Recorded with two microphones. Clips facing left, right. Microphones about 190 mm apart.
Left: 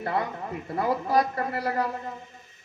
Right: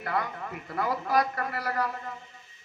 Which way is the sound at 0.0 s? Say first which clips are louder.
Left 3 dB; 25° left (ahead or behind).